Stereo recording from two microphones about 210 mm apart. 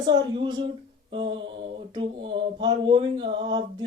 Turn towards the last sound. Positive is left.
turn(degrees=-25)  # may be behind; listen again after turning